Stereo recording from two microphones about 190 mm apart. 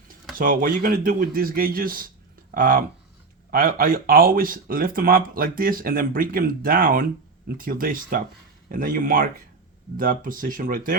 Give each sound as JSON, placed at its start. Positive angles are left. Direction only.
{"t": 0.3, "sound": "speech", "side_deg": -45}